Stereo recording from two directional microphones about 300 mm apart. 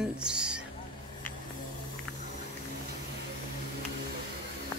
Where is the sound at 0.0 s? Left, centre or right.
Centre.